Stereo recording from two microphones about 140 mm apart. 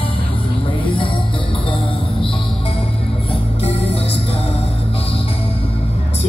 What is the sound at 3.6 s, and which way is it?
Music, 45° left (ahead or behind).